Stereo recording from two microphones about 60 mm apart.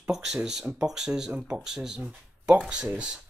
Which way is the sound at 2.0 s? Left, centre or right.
Centre.